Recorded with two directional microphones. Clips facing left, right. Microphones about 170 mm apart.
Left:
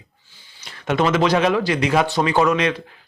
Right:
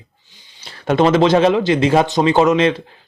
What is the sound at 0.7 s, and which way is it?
Speech, 30° right (ahead or behind).